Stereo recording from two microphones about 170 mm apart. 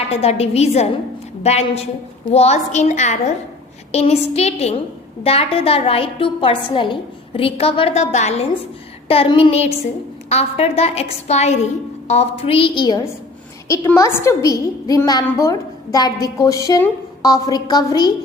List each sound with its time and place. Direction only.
0.1 s a woman's voice: 35° left (ahead or behind)
13.7 s a woman's voice: 15° left (ahead or behind)